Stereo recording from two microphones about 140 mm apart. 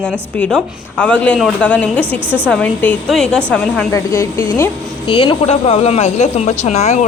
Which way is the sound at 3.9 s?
20° left (ahead or behind).